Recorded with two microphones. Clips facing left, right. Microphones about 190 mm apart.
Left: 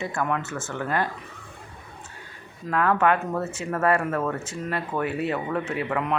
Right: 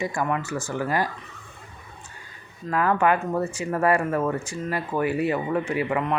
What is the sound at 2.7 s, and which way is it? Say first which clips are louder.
Speech: even; 5° right (ahead or behind).